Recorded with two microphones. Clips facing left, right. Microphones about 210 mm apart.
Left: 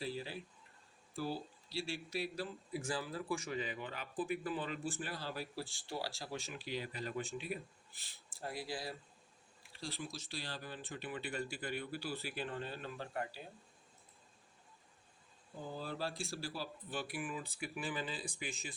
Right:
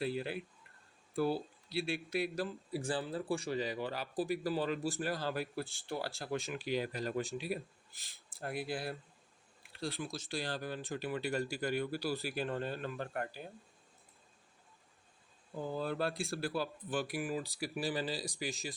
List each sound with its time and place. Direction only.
0.0 s speech: 60° right (ahead or behind); by 2.7 s 45° right (ahead or behind)
2.7 s speech: 30° right (ahead or behind)
8.0 s speech: 55° right (ahead or behind)
15.5 s speech: 50° right (ahead or behind)